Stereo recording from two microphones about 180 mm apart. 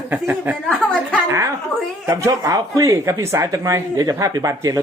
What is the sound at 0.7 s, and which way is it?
Speech, 5° left (ahead or behind).